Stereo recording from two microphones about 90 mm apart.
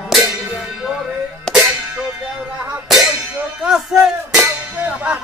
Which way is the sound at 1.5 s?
5° right (ahead or behind).